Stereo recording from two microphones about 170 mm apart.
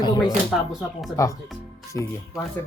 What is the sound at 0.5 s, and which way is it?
Speech, centre (ahead or behind).